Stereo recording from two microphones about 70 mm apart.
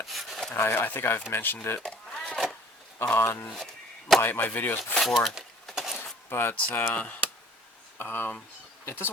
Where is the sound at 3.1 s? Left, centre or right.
Left.